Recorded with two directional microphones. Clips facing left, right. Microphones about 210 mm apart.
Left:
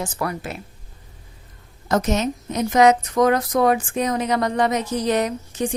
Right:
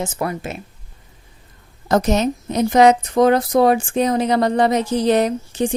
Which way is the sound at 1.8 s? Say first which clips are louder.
Right 4 dB; 35° right (ahead or behind).